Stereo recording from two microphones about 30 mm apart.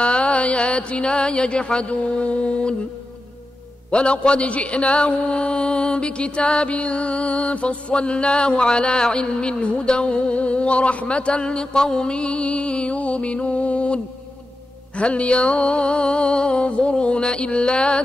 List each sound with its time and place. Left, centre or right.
0.0 s mantra: left
3.9 s a man's voice: left
12.2 s a man's voice: left